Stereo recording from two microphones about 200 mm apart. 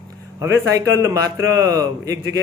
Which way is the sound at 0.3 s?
15° right (ahead or behind).